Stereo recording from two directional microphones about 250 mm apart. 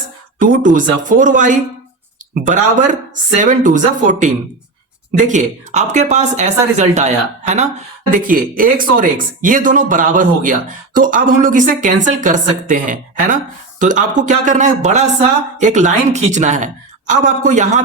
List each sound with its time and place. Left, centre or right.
0.3 s speech: right